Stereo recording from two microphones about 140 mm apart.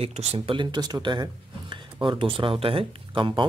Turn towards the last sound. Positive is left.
turn(degrees=-35)  # may be behind; listen again after turning